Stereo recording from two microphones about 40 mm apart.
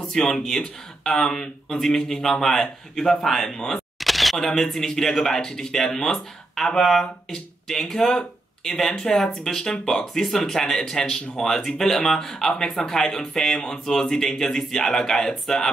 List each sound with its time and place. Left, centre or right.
0.1 s speech: centre
4.0 s single-lens reflex camera: centre
4.4 s speech: centre
6.6 s speech: centre